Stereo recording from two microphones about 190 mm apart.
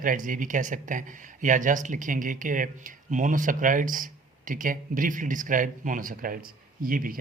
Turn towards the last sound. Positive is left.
turn(degrees=-50)  # may be behind; listen again after turning